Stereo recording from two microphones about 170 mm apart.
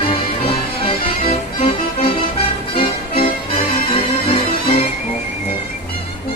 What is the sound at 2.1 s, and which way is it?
Music, 35° left (ahead or behind).